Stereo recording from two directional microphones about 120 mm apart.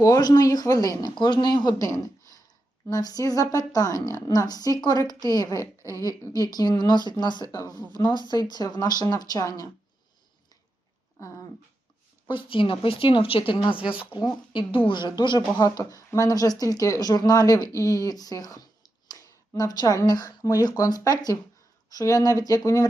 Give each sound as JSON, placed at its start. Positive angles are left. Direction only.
{"t": 0.0, "sound": "a woman's voice", "side_deg": 30}
{"t": 12.3, "sound": "a woman's voice", "side_deg": 45}